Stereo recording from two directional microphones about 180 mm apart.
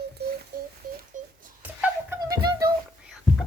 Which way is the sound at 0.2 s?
65° right (ahead or behind).